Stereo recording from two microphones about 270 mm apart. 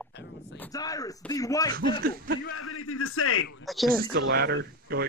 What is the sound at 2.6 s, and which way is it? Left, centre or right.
Speech, left.